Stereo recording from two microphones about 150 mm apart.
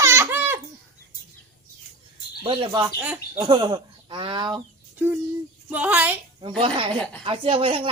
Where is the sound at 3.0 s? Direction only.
10° right (ahead or behind).